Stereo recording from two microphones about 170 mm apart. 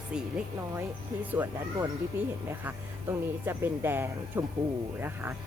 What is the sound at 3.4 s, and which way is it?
Speech, 15° right (ahead or behind).